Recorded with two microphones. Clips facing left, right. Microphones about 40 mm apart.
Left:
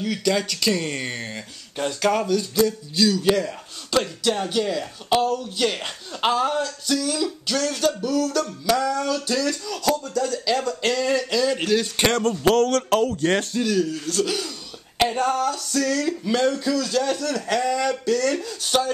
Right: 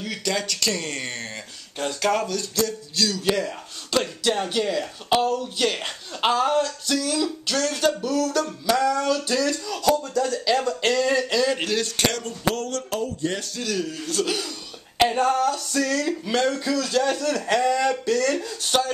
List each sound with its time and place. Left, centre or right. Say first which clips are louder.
0.0 s speech: left 4 dB; centre
12.4 s speech: left 7 dB; left
13.7 s speech: left 3 dB; centre